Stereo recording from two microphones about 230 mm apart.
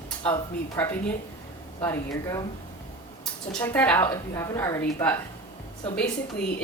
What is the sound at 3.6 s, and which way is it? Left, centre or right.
A woman's voice, centre.